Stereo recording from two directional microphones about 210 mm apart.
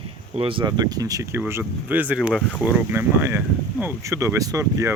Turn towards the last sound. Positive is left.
turn(degrees=-15)  # may be behind; listen again after turning